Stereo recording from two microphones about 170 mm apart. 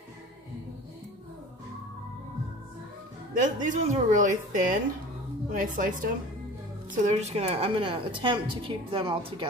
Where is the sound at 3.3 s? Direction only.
50° right (ahead or behind).